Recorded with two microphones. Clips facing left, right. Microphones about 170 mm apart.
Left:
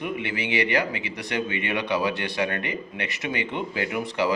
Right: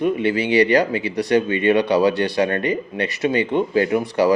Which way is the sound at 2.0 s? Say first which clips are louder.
Right 8 dB; 40° right (ahead or behind).